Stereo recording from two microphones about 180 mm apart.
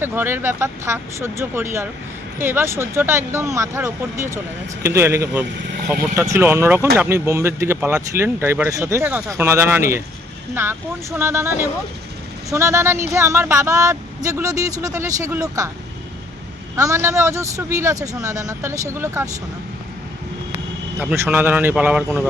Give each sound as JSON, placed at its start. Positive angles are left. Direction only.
{"t": 0.0, "sound": "speech", "side_deg": -10}
{"t": 16.7, "sound": "speech", "side_deg": -15}
{"t": 21.0, "sound": "speech", "side_deg": -10}